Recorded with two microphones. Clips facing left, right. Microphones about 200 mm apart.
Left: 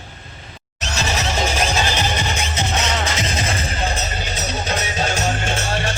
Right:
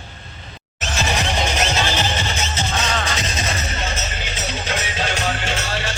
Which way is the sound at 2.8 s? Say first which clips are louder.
Left 1 dB; 30° left (ahead or behind).